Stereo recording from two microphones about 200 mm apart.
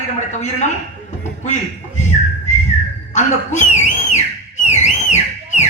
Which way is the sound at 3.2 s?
35° left (ahead or behind).